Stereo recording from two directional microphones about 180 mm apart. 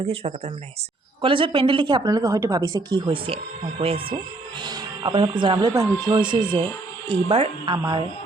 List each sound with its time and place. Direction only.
0.0 s a woman's voice: 35° right (ahead or behind)